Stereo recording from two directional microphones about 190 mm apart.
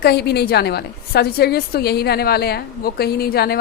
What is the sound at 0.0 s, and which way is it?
A woman's voice, 55° left (ahead or behind).